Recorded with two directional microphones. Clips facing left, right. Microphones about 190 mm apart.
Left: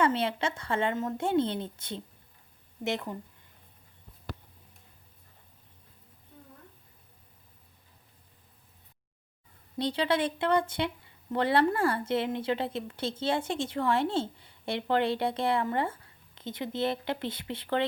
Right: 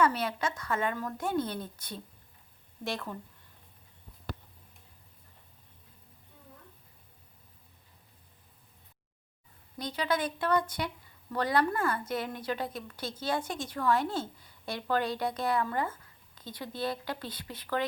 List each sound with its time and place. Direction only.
0.0 s a woman's voice: 25° left (ahead or behind)
9.7 s a woman's voice: 30° left (ahead or behind)